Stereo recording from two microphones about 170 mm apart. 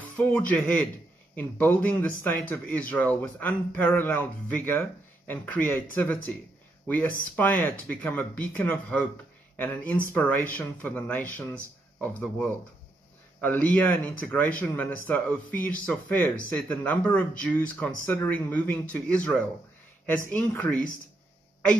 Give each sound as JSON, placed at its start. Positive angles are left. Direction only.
{"t": 0.2, "sound": "a man's voice", "side_deg": 10}
{"t": 7.3, "sound": "a man's voice", "side_deg": 10}